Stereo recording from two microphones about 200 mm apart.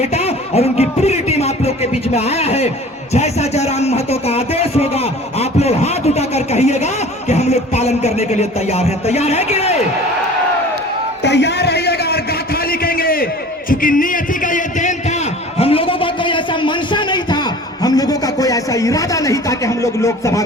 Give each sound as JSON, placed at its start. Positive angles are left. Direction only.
{"t": 0.0, "sound": "speech", "side_deg": 30}
{"t": 11.2, "sound": "a man's voice", "side_deg": 60}
{"t": 12.8, "sound": "a sound", "side_deg": 45}
{"t": 13.7, "sound": "a man's voice", "side_deg": 45}
{"t": 15.5, "sound": "a sound", "side_deg": 30}
{"t": 17.8, "sound": "speech", "side_deg": 20}